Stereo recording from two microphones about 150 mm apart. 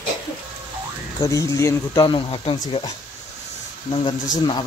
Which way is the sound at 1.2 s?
20° left (ahead or behind).